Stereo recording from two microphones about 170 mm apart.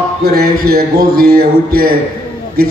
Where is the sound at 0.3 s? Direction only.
60° right (ahead or behind).